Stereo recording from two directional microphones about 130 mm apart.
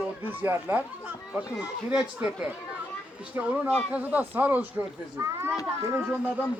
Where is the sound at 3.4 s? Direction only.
10° right (ahead or behind).